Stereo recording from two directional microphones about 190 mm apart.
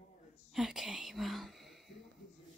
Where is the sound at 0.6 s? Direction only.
Centre (ahead or behind).